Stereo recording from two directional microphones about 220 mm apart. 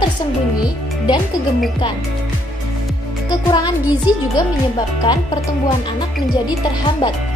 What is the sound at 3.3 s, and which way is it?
Speech, 20° left (ahead or behind).